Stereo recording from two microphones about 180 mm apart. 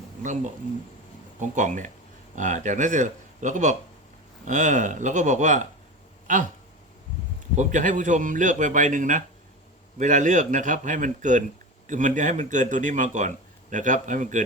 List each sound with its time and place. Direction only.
1.4 s a man's voice: 45° right (ahead or behind)
7.5 s a man's voice: 45° right (ahead or behind)